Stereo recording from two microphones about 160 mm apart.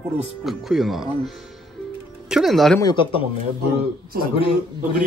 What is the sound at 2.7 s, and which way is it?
Speech, 30° left (ahead or behind).